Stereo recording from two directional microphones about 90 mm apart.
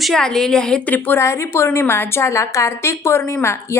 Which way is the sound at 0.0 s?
5° left (ahead or behind).